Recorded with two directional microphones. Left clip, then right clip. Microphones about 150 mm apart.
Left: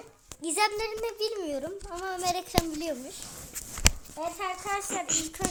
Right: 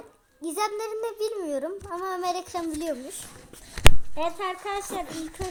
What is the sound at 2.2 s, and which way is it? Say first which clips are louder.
Speech: left 4 dB; 5° right (ahead or behind).